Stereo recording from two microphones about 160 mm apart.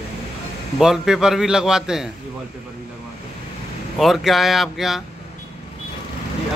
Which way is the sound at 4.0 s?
Centre (ahead or behind).